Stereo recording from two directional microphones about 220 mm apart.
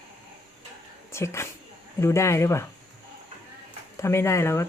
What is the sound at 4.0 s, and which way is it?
Speech, 10° left (ahead or behind).